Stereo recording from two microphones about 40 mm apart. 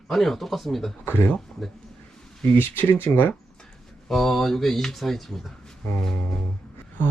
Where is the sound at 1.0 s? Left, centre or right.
Left.